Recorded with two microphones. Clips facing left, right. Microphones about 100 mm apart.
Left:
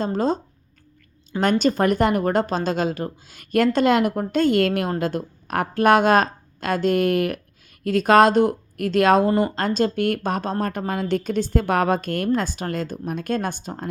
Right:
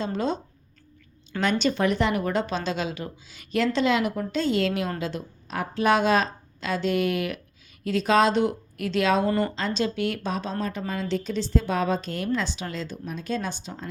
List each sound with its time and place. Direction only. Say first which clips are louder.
0.0 s speech: left 5 dB; 40° left (ahead or behind)
1.4 s a woman's voice: left 4 dB; 45° left (ahead or behind)